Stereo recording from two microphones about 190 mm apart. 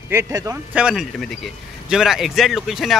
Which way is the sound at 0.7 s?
5° right (ahead or behind).